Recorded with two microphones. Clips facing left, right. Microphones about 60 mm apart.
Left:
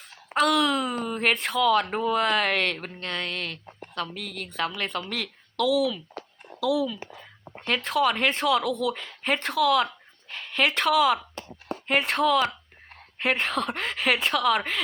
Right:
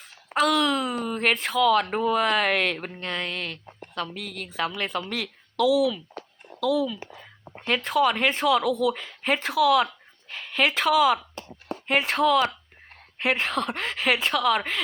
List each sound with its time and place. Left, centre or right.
0.0 s speech: centre